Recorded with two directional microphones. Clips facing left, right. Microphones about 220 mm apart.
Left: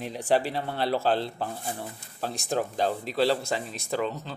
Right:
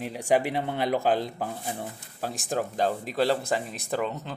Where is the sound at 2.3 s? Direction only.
45° right (ahead or behind).